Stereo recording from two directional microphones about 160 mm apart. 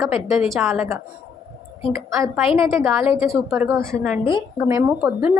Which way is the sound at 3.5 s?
15° right (ahead or behind).